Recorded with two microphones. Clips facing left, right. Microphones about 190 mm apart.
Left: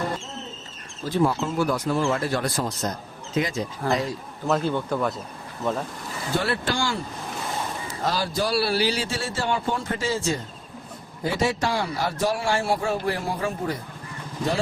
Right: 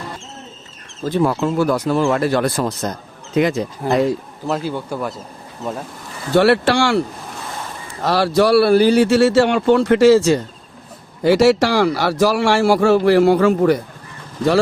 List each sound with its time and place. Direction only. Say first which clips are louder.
1.0 s speech: right 5 dB; 65° right (ahead or behind)
4.4 s speech: right 1 dB; 5° right (ahead or behind)
6.3 s speech: right 12 dB; 75° right (ahead or behind)
8.0 s a man's voice: right 11 dB; 70° right (ahead or behind)